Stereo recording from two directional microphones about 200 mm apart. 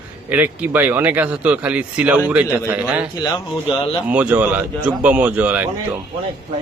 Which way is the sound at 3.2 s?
20° left (ahead or behind).